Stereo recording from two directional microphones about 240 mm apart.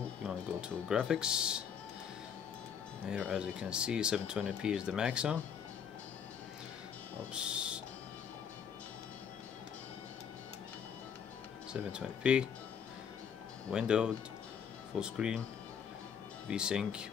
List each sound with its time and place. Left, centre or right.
0.0 s music: centre
3.1 s speech: centre
7.3 s owl: centre
11.7 s speech: centre
13.7 s speech: centre
16.4 s speech: centre